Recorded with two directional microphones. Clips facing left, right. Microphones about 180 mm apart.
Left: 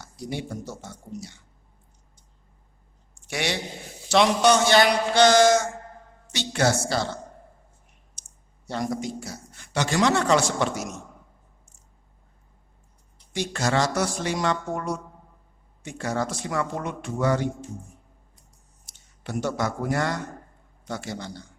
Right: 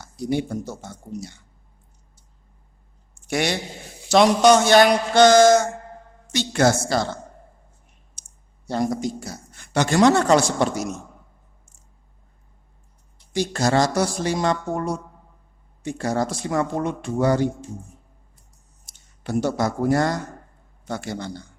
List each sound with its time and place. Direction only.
0.0 s a man's voice: 45° right (ahead or behind)
3.2 s a man's voice: 45° right (ahead or behind)
8.6 s a man's voice: 35° right (ahead or behind)
13.3 s a man's voice: 40° right (ahead or behind)
19.2 s a man's voice: 35° right (ahead or behind)
20.8 s a man's voice: 50° right (ahead or behind)